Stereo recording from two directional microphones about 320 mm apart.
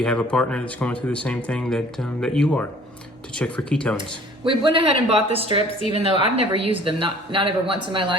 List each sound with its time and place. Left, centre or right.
0.0 s speech: centre
4.4 s a woman's voice: centre